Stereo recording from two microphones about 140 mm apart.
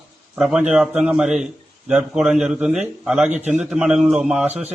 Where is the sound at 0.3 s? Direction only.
5° right (ahead or behind).